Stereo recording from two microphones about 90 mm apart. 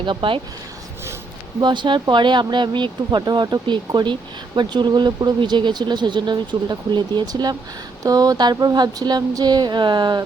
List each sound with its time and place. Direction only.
0.0 s speech: 70° right (ahead or behind)
1.6 s speech: 60° right (ahead or behind)
8.0 s a sound: 45° right (ahead or behind)